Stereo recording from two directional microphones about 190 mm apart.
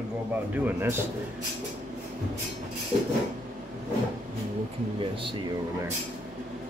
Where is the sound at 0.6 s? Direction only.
10° right (ahead or behind).